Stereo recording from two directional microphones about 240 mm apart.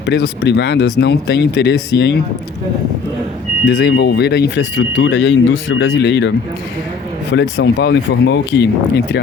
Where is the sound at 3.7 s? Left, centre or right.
Left.